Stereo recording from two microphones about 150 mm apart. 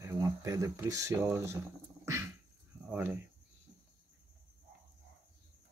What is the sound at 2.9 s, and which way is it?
Speech, 10° right (ahead or behind).